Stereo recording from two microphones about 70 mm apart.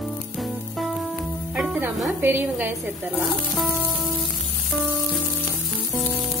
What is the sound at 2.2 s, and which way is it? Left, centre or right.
Speech, right.